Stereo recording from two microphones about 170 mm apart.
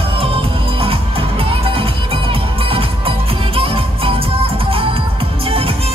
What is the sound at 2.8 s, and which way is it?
Music, 35° right (ahead or behind).